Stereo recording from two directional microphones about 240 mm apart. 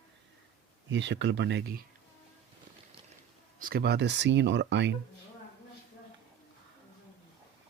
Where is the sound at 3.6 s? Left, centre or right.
Right.